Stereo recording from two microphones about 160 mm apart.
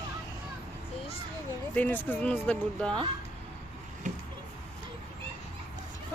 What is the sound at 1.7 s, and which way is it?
Speech, 10° left (ahead or behind).